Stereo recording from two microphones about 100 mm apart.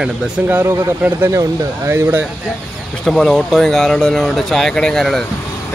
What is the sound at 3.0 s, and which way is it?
Speech, 5° left (ahead or behind).